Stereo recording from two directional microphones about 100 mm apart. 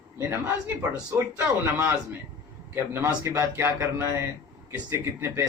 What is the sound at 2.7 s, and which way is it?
Speech, 25° right (ahead or behind).